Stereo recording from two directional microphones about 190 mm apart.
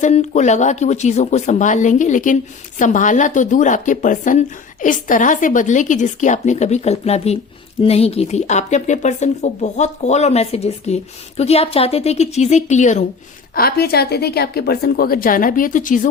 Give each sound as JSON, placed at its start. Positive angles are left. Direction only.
{"t": 0.0, "sound": "speech", "side_deg": 35}
{"t": 13.6, "sound": "a woman's voice", "side_deg": 55}